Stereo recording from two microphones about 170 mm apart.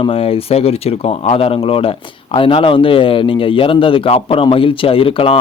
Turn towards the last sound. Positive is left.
turn(degrees=35)  # may be behind; listen again after turning